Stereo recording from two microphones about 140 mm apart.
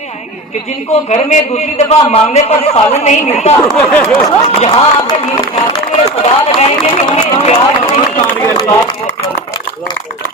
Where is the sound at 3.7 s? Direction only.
10° left (ahead or behind).